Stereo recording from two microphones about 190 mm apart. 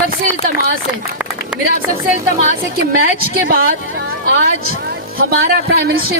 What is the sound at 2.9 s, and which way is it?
A woman's voice, 55° right (ahead or behind).